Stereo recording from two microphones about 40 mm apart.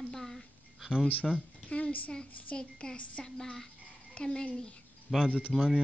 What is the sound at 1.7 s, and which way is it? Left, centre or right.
Speech, left.